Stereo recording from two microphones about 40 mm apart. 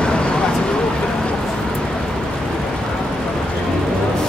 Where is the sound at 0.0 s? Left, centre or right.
Left.